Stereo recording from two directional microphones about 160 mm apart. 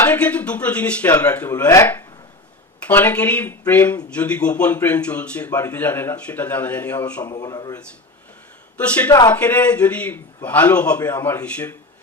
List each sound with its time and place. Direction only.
0.0 s a man's voice: 10° left (ahead or behind)
7.3 s speech: 25° left (ahead or behind)
8.8 s a man's voice: 10° left (ahead or behind)